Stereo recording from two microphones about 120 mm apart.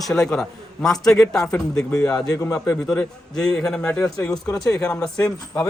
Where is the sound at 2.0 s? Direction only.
30° left (ahead or behind).